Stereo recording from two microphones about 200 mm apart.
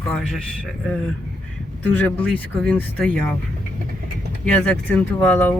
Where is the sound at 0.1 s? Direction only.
5° left (ahead or behind).